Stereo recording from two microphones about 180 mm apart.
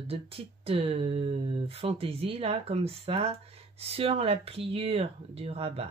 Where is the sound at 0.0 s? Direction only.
35° right (ahead or behind).